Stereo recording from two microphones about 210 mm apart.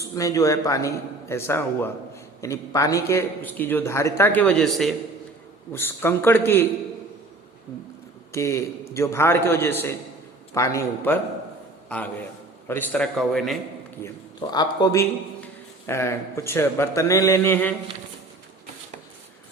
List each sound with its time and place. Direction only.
0.1 s a man's voice: 15° left (ahead or behind)
8.3 s a man's voice: 15° left (ahead or behind)
14.0 s a man's voice: 20° left (ahead or behind)